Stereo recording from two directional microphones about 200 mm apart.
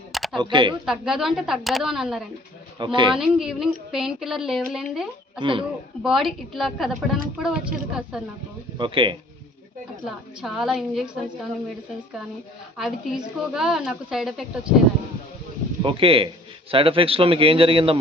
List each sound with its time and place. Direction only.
0.1 s a sound: centre (ahead or behind)
0.3 s a man's voice: 25° right (ahead or behind)
0.9 s a woman's voice: centre (ahead or behind)
2.7 s a man's voice: 25° right (ahead or behind)
3.2 s a woman's voice: 5° right (ahead or behind)
5.4 s a man's voice: 25° right (ahead or behind)
6.0 s a woman's voice: centre (ahead or behind)
8.8 s a man's voice: 25° right (ahead or behind)
10.4 s a woman's voice: centre (ahead or behind)
12.7 s a woman's voice: 5° right (ahead or behind)
15.8 s a man's voice: 25° right (ahead or behind)